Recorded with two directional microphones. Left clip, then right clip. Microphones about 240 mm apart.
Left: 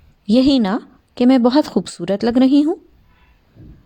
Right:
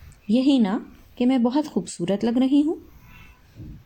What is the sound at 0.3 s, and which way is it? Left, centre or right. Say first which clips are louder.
Speech: left 6 dB; left.